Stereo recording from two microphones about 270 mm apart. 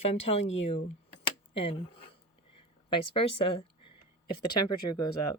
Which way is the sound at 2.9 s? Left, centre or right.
Centre.